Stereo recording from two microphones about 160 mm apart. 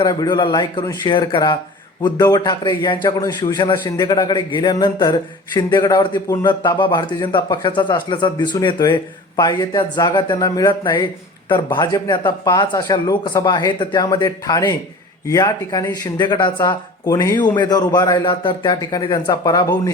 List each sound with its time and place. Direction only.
0.0 s a man's voice: 25° left (ahead or behind)